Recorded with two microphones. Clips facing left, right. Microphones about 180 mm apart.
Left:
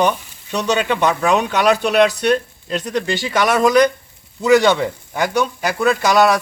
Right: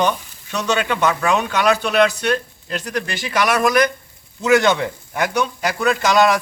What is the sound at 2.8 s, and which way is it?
Speech, 25° left (ahead or behind).